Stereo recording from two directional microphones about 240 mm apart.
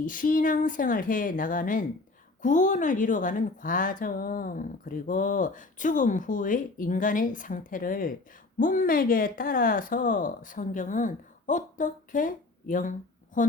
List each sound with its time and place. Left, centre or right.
0.0 s a woman's voice: left